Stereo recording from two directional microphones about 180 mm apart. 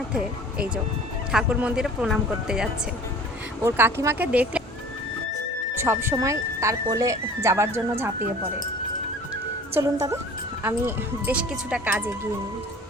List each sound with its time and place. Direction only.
0.1 s speech: 5° right (ahead or behind)
5.7 s speech: 15° right (ahead or behind)
9.7 s speech: 15° right (ahead or behind)